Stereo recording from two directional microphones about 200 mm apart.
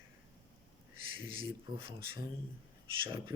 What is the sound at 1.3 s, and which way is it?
Speech, 25° right (ahead or behind).